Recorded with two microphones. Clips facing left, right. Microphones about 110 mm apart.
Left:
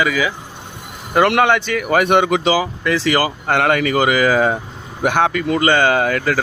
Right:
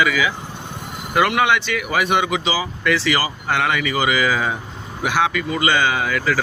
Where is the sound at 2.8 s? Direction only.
40° left (ahead or behind).